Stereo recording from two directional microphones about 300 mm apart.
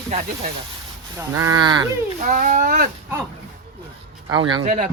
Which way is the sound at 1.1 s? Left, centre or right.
Centre.